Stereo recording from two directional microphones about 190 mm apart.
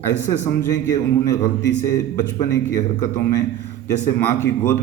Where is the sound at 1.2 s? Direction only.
15° left (ahead or behind).